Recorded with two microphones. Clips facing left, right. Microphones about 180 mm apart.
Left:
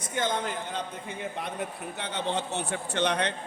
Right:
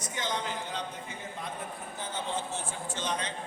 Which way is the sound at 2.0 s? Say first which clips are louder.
Left 4 dB; 70° left (ahead or behind).